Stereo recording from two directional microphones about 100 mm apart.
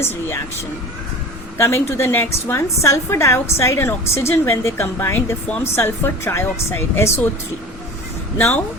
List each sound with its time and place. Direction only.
1.5 s a woman's voice: 25° left (ahead or behind)
8.4 s a woman's voice: 25° left (ahead or behind)